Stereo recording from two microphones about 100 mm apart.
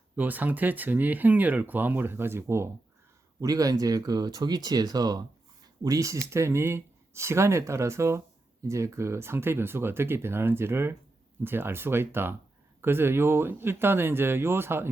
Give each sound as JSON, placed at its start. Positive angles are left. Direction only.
{"t": 0.2, "sound": "speech", "side_deg": -15}
{"t": 3.4, "sound": "speech", "side_deg": -35}